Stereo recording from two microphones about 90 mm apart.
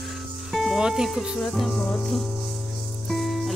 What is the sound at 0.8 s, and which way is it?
Speech, 5° right (ahead or behind).